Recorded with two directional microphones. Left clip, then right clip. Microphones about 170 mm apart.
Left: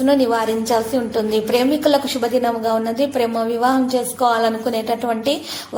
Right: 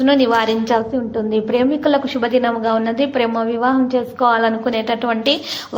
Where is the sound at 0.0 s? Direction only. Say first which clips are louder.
Right 2 dB; 20° right (ahead or behind).